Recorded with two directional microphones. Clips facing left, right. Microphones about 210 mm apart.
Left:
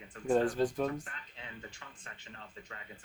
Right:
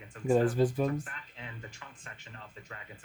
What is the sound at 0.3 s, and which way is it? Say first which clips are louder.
Speech: right 3 dB; 5° right (ahead or behind).